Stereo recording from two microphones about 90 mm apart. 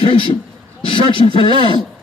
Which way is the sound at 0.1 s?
70° left (ahead or behind).